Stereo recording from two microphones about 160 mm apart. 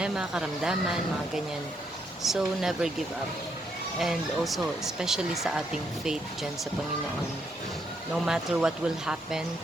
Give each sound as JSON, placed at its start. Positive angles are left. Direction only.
{"t": 0.0, "sound": "speech", "side_deg": -5}
{"t": 2.2, "sound": "speech", "side_deg": 0}
{"t": 4.0, "sound": "speech", "side_deg": 0}
{"t": 8.1, "sound": "speech", "side_deg": 0}